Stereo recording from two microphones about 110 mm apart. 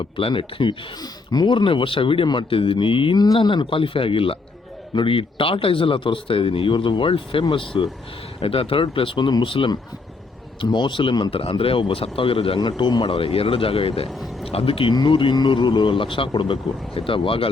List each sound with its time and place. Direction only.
0.0 s speech: 55° left (ahead or behind)
11.3 s speech: 55° left (ahead or behind)